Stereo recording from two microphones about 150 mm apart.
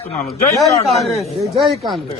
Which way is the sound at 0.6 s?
Centre (ahead or behind).